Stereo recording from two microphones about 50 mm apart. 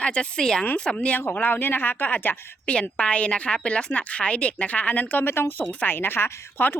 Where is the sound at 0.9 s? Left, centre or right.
Left.